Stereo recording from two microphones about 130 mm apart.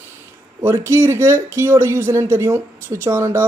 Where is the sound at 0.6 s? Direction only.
20° right (ahead or behind).